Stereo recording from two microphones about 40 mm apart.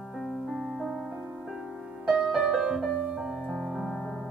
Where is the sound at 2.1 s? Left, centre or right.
Centre.